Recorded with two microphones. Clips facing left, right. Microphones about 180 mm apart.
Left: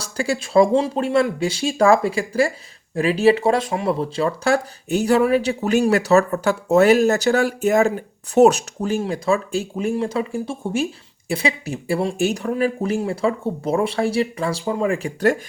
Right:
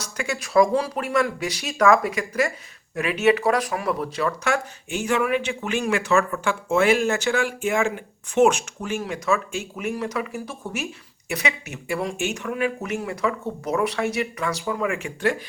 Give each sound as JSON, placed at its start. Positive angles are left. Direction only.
{"t": 0.0, "sound": "speech", "side_deg": 30}